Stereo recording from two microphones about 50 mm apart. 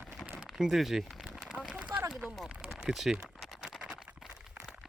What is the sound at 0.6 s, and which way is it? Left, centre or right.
Speech, centre.